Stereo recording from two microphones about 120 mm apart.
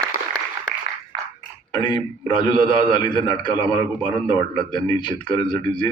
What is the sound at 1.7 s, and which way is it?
A man's voice, 40° left (ahead or behind).